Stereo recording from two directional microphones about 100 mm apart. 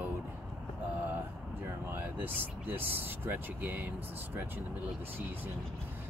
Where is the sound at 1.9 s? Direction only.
20° right (ahead or behind).